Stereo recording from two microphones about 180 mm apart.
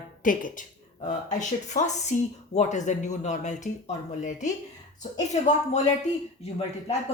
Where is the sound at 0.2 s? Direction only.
45° left (ahead or behind).